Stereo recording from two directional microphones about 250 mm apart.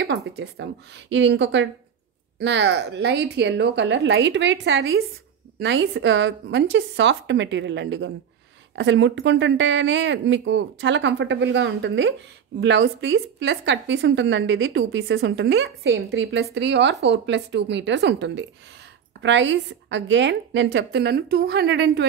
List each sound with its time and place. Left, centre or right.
0.0 s a woman's voice: right